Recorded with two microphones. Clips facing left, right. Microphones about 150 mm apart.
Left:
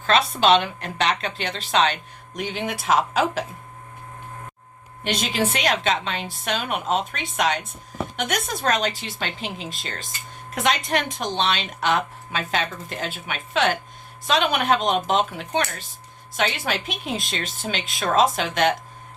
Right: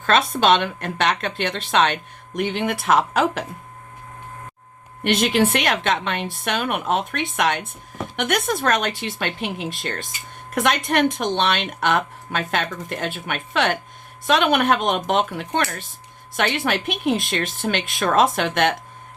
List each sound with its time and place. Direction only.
0.0 s speech: 55° right (ahead or behind)
5.0 s speech: 60° right (ahead or behind)